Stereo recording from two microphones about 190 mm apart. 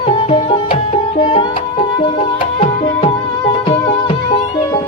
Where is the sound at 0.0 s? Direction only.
30° left (ahead or behind).